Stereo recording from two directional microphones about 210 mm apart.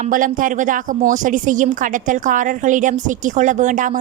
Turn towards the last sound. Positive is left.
turn(degrees=-35)  # may be behind; listen again after turning